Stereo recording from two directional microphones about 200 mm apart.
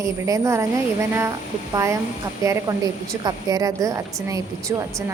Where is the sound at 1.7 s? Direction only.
15° right (ahead or behind).